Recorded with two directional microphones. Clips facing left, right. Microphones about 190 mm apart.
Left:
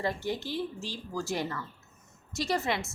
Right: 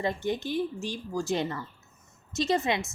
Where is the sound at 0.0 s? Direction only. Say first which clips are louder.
Right 3 dB; 20° right (ahead or behind).